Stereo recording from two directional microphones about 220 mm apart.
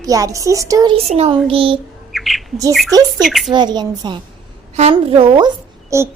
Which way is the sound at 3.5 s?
20° right (ahead or behind).